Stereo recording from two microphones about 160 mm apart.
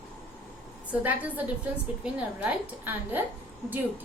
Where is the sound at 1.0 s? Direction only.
10° right (ahead or behind).